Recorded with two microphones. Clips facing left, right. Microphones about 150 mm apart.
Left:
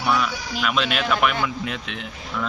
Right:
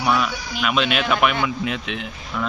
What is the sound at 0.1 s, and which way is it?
Speech, 10° right (ahead or behind).